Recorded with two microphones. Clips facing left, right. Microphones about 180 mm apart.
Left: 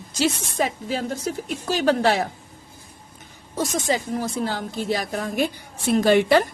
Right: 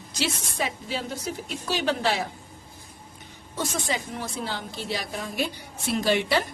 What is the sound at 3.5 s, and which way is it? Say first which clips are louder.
A woman's voice: left 6 dB; 40° left (ahead or behind).